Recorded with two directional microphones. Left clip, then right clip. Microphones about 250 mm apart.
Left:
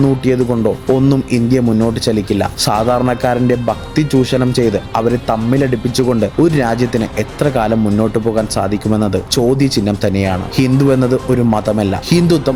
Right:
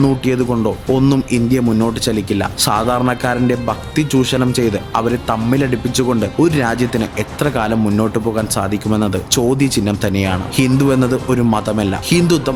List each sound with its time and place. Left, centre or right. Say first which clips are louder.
0.0 s speech: left 2 dB; centre